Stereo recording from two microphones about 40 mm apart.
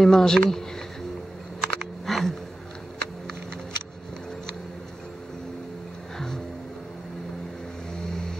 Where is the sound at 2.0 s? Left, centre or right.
Centre.